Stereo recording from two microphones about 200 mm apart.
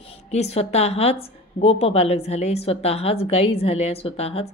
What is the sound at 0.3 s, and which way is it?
A woman's voice, 30° left (ahead or behind).